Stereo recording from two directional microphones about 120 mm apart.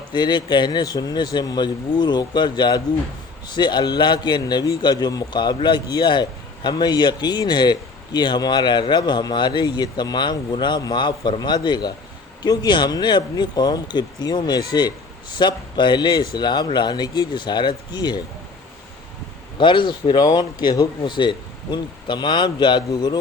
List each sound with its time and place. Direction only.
0.1 s a man's voice: 40° left (ahead or behind)
19.5 s a man's voice: 40° left (ahead or behind)